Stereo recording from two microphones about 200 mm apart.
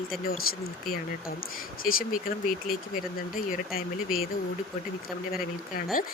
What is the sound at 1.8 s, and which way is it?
Speech, 45° left (ahead or behind).